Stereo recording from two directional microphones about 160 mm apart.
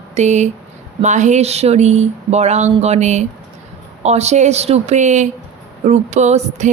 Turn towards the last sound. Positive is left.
turn(degrees=-45)  # may be behind; listen again after turning